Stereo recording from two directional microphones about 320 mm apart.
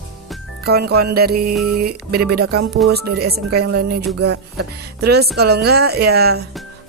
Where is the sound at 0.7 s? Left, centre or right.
Right.